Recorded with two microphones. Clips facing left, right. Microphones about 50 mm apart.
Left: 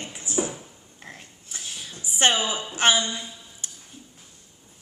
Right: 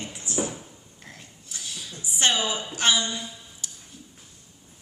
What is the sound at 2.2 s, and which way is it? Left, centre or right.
Speech, left.